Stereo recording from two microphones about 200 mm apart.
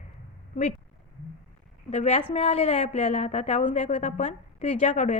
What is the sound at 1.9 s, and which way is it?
A woman's voice, 35° left (ahead or behind).